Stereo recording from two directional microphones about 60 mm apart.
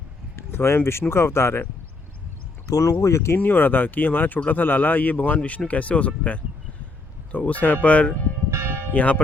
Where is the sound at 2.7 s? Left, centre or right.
Left.